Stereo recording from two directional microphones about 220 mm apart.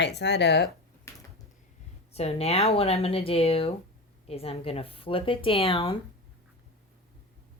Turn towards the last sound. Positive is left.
turn(degrees=25)  # may be behind; listen again after turning